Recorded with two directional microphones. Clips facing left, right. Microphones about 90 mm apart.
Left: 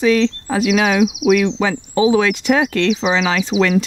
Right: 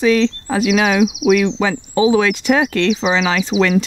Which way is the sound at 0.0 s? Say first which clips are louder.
Even; 20° right (ahead or behind).